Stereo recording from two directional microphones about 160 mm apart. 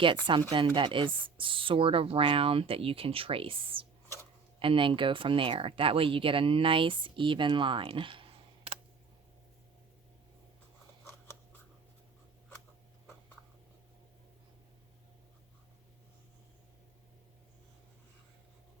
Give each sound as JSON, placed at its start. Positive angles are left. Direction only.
{"t": 0.5, "sound": "speech", "side_deg": -30}